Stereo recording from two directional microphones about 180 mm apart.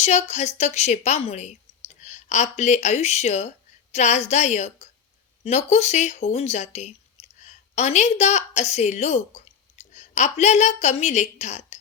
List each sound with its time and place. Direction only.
0.0 s a woman's voice: 40° left (ahead or behind)